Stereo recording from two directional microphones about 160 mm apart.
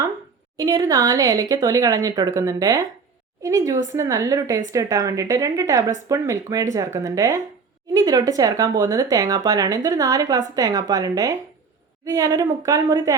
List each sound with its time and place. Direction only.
0.5 s speech: 25° right (ahead or behind)